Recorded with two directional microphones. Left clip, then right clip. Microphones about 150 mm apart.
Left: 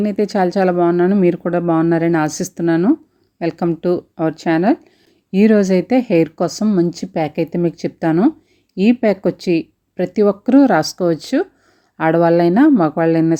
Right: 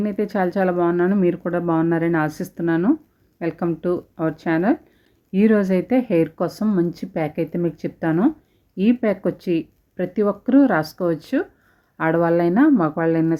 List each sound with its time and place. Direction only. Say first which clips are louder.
0.0 s speech: left 5 dB; 30° left (ahead or behind)